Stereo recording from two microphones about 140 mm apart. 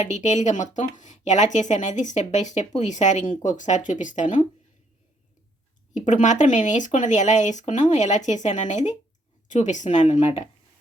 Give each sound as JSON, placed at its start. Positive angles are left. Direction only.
{"t": 0.0, "sound": "speech", "side_deg": 55}
{"t": 5.9, "sound": "speech", "side_deg": 60}
{"t": 10.2, "sound": "speech", "side_deg": 45}